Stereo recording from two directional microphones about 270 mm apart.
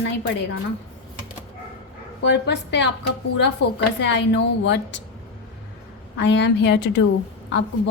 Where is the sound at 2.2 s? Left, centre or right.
Left.